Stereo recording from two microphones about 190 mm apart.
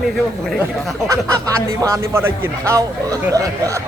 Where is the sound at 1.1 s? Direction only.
15° right (ahead or behind).